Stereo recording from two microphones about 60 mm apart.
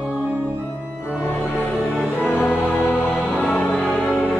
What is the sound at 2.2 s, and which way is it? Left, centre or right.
Music, left.